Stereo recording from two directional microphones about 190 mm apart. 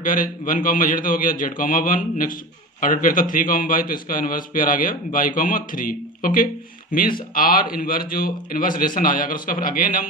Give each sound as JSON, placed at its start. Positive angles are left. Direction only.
{"t": 0.0, "sound": "a man's voice", "side_deg": 45}